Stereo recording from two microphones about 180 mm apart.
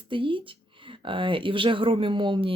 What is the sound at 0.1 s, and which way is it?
Speech, 30° right (ahead or behind).